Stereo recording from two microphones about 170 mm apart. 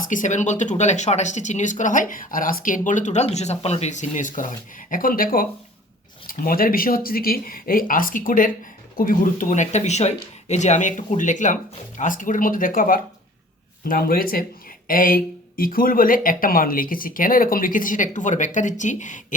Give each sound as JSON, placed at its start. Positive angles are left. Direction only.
{"t": 0.0, "sound": "speech", "side_deg": 50}